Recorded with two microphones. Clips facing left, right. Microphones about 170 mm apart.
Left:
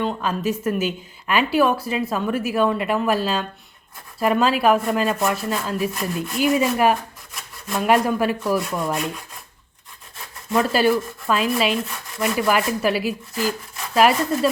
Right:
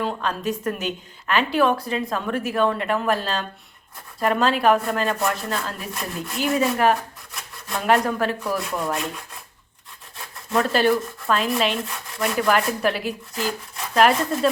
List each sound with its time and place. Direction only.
0.0 s a woman's voice: 5° left (ahead or behind)
7.9 s rub: 10° left (ahead or behind)
10.5 s rub: 5° left (ahead or behind)